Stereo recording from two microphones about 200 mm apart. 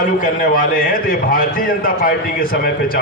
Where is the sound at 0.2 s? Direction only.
45° left (ahead or behind).